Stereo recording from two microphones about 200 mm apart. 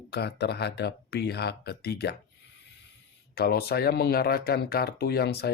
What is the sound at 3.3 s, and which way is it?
Speech, 50° left (ahead or behind).